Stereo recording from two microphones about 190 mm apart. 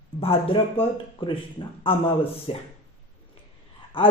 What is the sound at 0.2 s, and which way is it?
A man's voice, 30° left (ahead or behind).